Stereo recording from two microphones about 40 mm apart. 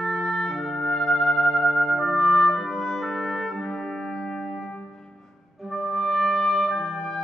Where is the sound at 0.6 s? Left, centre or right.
Centre.